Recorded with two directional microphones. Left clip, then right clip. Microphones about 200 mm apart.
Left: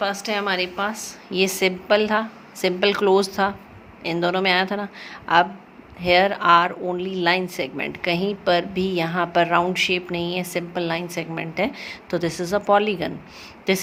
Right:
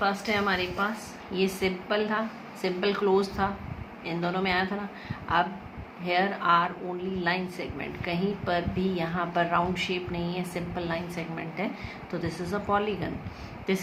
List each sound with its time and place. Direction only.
0.0 s a woman's voice: 50° left (ahead or behind)
6.0 s a woman's voice: 50° left (ahead or behind)